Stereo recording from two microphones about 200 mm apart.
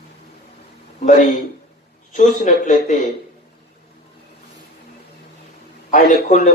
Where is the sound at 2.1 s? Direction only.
40° left (ahead or behind).